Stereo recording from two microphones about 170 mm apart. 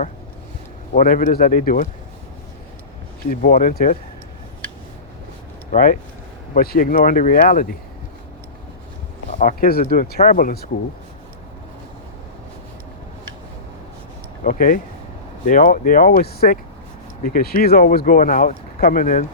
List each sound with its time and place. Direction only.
0.9 s speech: 55° left (ahead or behind)
3.2 s speech: 55° left (ahead or behind)
5.7 s speech: 55° left (ahead or behind)
9.4 s speech: 60° left (ahead or behind)
14.4 s speech: 55° left (ahead or behind)